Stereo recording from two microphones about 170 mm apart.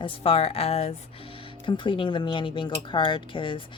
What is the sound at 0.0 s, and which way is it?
Speech, 30° left (ahead or behind).